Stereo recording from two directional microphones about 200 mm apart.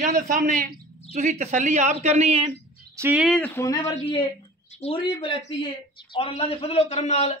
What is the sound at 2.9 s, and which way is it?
Speech, 10° right (ahead or behind).